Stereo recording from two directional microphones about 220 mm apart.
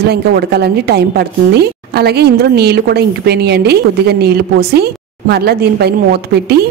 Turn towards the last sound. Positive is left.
turn(degrees=-45)  # may be behind; listen again after turning